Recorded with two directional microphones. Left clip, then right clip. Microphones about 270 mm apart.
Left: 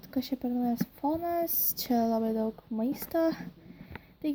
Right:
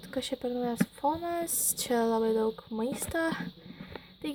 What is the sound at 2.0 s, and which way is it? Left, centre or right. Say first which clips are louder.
A woman's voice: right 4 dB; centre.